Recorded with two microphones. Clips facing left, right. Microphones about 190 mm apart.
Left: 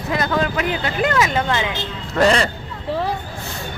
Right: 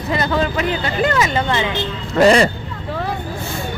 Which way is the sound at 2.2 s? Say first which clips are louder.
Right 4 dB; 10° right (ahead or behind).